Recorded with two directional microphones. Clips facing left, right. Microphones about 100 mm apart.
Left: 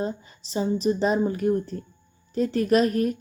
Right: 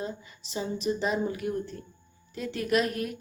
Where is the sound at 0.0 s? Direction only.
35° left (ahead or behind).